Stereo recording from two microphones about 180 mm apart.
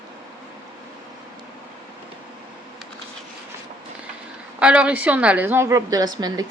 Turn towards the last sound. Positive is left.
turn(degrees=-20)  # may be behind; listen again after turning